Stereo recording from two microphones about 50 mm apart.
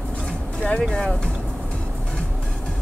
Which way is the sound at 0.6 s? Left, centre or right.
Centre.